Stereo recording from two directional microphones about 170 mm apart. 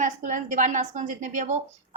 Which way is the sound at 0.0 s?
50° right (ahead or behind).